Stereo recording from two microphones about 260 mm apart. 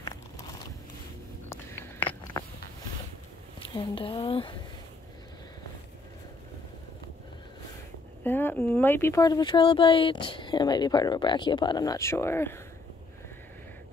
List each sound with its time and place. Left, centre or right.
1.5 s a sound: centre
3.7 s speech: centre
8.2 s speech: centre